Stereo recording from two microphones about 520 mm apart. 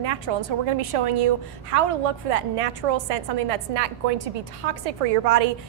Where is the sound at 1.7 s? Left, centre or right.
Right.